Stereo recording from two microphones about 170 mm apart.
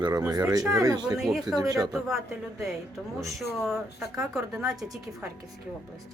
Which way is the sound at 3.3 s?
Centre (ahead or behind).